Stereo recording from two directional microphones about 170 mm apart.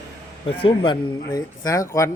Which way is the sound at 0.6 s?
30° left (ahead or behind).